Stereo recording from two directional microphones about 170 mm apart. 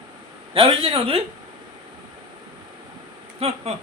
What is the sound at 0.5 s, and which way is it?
Speech, 30° right (ahead or behind).